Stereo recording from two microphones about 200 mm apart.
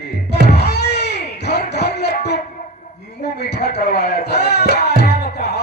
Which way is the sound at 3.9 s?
55° left (ahead or behind).